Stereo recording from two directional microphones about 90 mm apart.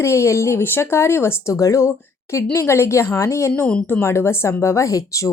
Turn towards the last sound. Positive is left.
turn(degrees=40)  # may be behind; listen again after turning